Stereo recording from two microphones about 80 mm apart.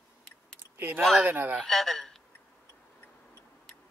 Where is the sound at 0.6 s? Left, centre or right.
Right.